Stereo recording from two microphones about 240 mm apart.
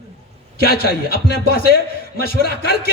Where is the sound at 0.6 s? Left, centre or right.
Left.